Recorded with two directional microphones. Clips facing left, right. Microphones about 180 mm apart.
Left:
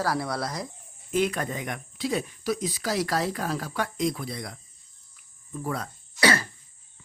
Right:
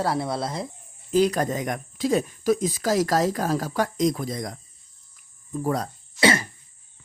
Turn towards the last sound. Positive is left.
turn(degrees=-25)  # may be behind; listen again after turning